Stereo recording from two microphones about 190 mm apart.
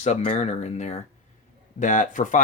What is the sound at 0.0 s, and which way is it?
Speech, 35° left (ahead or behind).